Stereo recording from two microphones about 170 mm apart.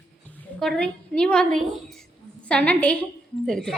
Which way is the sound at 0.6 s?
5° left (ahead or behind).